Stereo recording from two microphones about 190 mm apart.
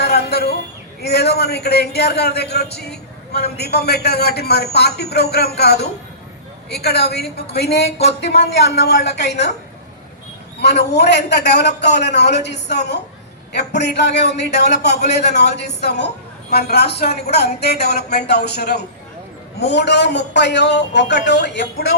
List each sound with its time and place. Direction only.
0.0 s a sound: 55° left (ahead or behind)
1.0 s a man's voice: 55° left (ahead or behind)
7.9 s speech: 35° left (ahead or behind)
8.2 s a man's voice: 60° left (ahead or behind)
10.6 s a man's voice: 60° left (ahead or behind)